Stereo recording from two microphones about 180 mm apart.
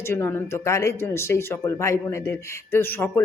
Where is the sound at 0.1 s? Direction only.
10° left (ahead or behind).